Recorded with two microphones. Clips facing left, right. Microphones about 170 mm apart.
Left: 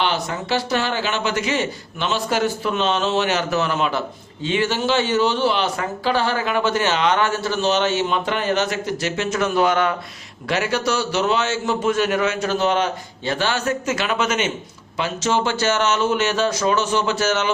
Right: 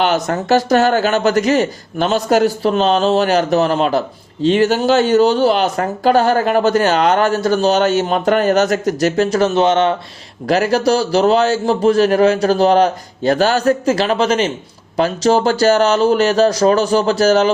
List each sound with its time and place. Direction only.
0.0 s speech: 45° right (ahead or behind); by 9.9 s 25° right (ahead or behind)
10.5 s speech: 35° right (ahead or behind)